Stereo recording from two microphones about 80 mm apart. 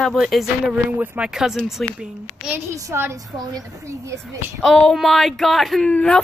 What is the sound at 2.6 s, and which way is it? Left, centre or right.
Speech, right.